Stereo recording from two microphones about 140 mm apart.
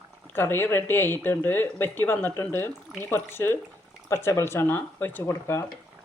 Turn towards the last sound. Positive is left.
turn(degrees=20)  # may be behind; listen again after turning